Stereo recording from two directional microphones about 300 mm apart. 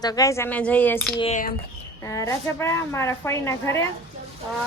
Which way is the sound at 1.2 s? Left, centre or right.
Left.